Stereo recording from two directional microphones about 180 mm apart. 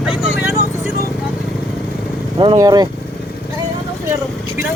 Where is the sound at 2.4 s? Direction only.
25° right (ahead or behind).